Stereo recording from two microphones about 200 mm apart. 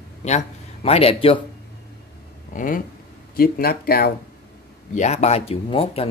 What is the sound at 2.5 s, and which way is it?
Speech, 40° left (ahead or behind).